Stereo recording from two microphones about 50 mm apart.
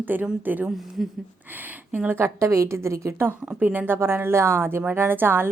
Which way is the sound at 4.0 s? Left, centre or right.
Right.